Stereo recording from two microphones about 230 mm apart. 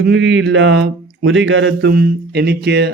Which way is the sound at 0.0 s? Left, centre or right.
Right.